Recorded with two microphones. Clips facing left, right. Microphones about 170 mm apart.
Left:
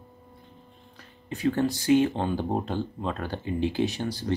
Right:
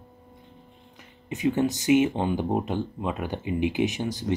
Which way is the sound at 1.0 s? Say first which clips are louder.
Right 2 dB; 20° right (ahead or behind).